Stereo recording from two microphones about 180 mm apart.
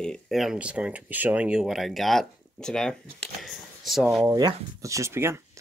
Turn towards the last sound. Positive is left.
turn(degrees=-15)  # may be behind; listen again after turning